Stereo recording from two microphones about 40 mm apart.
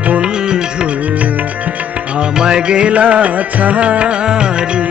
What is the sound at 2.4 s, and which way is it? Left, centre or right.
Music, right.